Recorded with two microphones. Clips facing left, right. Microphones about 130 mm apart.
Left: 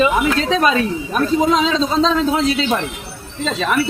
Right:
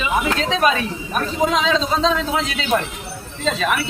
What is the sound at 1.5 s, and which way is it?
Speech, 35° left (ahead or behind).